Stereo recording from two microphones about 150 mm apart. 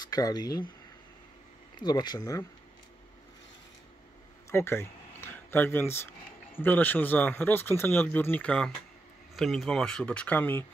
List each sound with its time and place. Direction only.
0.0 s speech: 25° left (ahead or behind)
1.8 s speech: 30° left (ahead or behind)
4.5 s a sound: 15° left (ahead or behind)
6.5 s speech: 10° left (ahead or behind)